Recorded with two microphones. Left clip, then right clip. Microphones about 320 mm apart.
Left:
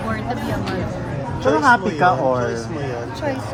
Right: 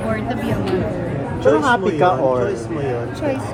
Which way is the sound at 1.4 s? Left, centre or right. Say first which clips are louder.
Even; left.